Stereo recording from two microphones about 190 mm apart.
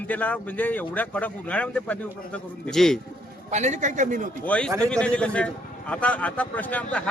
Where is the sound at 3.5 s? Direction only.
40° right (ahead or behind).